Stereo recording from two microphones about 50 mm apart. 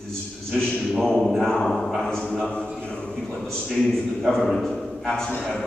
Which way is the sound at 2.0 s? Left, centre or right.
Centre.